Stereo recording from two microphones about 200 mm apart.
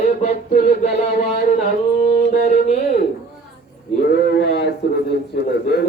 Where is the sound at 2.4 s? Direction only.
35° left (ahead or behind).